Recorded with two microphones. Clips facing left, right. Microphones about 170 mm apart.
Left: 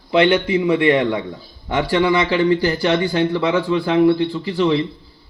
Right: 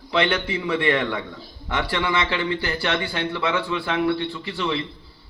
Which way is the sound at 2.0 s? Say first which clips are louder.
Left 9 dB; 30° left (ahead or behind).